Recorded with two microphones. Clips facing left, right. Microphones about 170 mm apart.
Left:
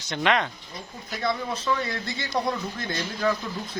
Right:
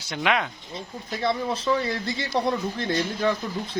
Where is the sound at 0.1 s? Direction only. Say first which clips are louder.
Left 1 dB; 5° right (ahead or behind).